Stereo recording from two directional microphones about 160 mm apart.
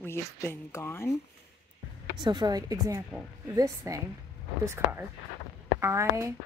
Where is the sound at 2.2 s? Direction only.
25° right (ahead or behind).